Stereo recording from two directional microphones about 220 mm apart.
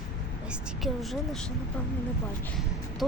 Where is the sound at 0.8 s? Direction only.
Centre (ahead or behind).